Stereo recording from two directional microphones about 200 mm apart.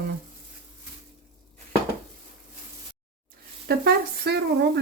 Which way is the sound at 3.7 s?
50° right (ahead or behind).